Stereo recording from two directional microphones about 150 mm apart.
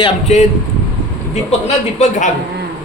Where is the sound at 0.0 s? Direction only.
50° left (ahead or behind).